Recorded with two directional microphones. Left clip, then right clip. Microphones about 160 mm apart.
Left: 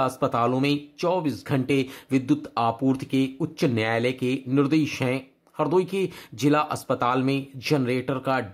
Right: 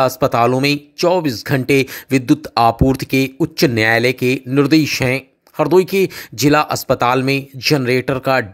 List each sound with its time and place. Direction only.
0.0 s speech: 35° right (ahead or behind)